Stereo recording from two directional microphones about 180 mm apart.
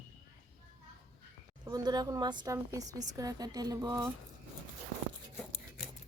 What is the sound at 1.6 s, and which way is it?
A woman's voice, 25° right (ahead or behind).